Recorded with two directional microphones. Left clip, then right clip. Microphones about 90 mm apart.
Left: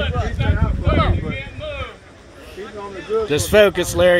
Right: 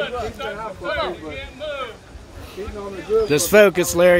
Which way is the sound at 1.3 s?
40° right (ahead or behind).